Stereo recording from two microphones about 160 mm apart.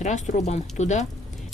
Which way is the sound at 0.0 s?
50° left (ahead or behind).